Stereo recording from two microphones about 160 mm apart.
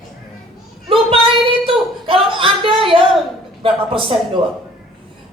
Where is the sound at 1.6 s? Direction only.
35° right (ahead or behind).